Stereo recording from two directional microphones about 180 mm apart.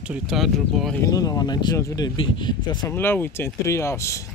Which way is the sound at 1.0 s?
20° left (ahead or behind).